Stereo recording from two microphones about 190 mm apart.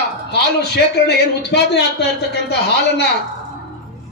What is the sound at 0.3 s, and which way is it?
A man's voice, 60° left (ahead or behind).